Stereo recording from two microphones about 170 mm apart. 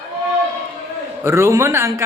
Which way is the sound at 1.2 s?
15° right (ahead or behind).